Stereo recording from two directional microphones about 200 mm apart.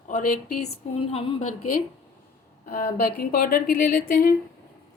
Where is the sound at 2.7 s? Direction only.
45° left (ahead or behind).